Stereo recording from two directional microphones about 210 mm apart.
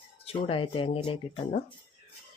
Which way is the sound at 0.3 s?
25° left (ahead or behind).